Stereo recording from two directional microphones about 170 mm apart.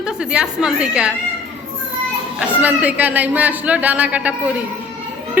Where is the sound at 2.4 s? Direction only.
10° right (ahead or behind).